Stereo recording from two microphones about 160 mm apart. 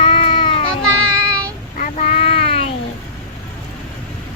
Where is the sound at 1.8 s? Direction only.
50° left (ahead or behind).